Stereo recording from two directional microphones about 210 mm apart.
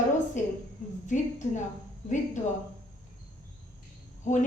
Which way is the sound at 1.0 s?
35° left (ahead or behind).